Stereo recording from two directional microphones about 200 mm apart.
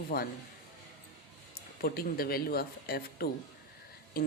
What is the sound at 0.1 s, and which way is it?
Speech, 45° left (ahead or behind).